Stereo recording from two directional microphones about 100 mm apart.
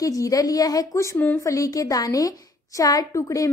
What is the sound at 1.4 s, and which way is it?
A woman's voice, 35° left (ahead or behind).